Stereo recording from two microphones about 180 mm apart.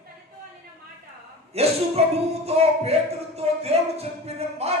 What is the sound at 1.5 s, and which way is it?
Speech, 35° right (ahead or behind).